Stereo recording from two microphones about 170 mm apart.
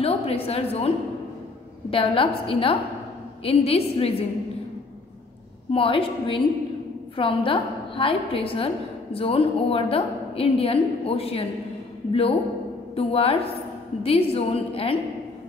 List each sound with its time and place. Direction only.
0.0 s a woman's voice: 35° left (ahead or behind)
5.7 s a woman's voice: 30° left (ahead or behind)